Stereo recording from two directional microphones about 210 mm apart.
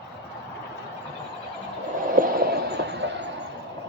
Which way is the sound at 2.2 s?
50° right (ahead or behind).